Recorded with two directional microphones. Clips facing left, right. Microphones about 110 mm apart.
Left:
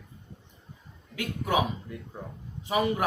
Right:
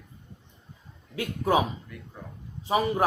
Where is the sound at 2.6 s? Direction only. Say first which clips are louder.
Right 1 dB; 35° right (ahead or behind).